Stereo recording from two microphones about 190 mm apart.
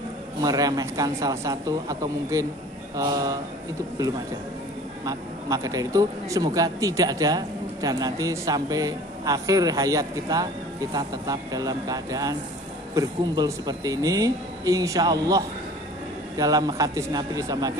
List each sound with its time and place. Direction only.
0.4 s speech: 20° right (ahead or behind)
5.0 s speech: 20° right (ahead or behind)